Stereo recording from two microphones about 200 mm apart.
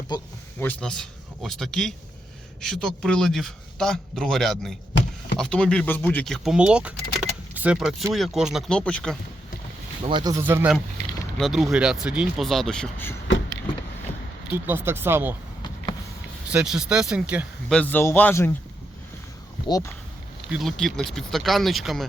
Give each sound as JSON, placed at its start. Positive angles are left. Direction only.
{"t": 0.1, "sound": "speech", "side_deg": 20}
{"t": 0.6, "sound": "a man's voice", "side_deg": 5}
{"t": 10.0, "sound": "a man's voice", "side_deg": -25}
{"t": 14.5, "sound": "speech", "side_deg": -10}
{"t": 16.5, "sound": "a man's voice", "side_deg": -5}
{"t": 17.7, "sound": "speech", "side_deg": 10}
{"t": 19.6, "sound": "speech", "side_deg": 15}
{"t": 20.5, "sound": "a man's voice", "side_deg": 0}